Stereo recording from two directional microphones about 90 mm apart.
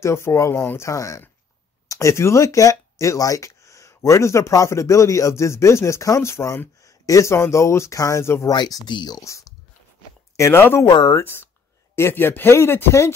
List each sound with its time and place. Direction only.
0.0 s speech: 30° left (ahead or behind)
8.5 s speech: 45° left (ahead or behind)
9.2 s speech: 35° left (ahead or behind)
10.9 s speech: 50° left (ahead or behind)
11.9 s speech: 25° left (ahead or behind)